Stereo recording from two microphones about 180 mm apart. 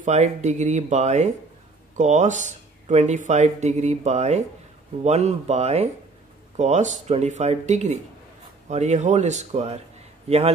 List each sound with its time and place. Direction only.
0.0 s speech: 40° right (ahead or behind)